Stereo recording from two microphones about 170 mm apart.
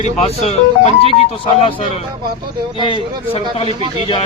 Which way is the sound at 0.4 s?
35° left (ahead or behind).